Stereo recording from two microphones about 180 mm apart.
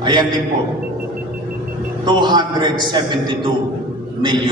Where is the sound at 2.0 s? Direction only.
25° right (ahead or behind).